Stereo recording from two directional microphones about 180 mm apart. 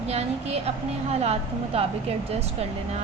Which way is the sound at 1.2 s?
35° right (ahead or behind).